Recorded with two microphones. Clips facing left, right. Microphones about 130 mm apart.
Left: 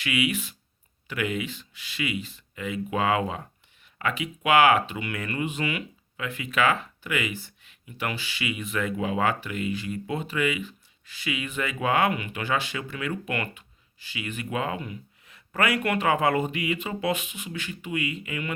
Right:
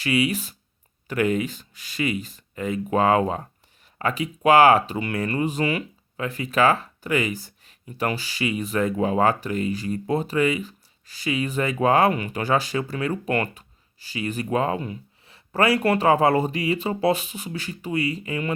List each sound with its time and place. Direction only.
0.0 s speech: 35° right (ahead or behind)